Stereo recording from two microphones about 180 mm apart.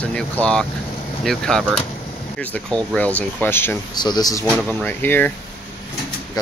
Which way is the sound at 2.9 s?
5° left (ahead or behind).